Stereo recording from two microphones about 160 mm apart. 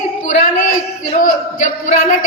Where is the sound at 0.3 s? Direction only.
55° left (ahead or behind).